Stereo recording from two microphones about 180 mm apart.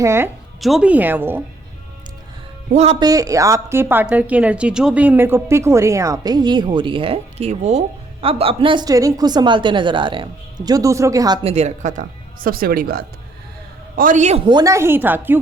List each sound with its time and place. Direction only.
0.0 s a woman's voice: 15° right (ahead or behind)
0.6 s a woman's voice: 5° right (ahead or behind)
2.7 s speech: 35° right (ahead or behind)
3.0 s a woman's voice: 20° right (ahead or behind)
11.4 s speech: 35° right (ahead or behind)
14.4 s a woman's voice: 20° right (ahead or behind)